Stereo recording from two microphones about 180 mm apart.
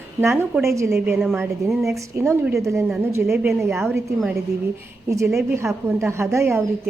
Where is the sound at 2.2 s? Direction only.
15° right (ahead or behind).